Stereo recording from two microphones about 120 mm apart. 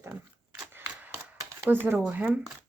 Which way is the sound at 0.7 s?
15° right (ahead or behind).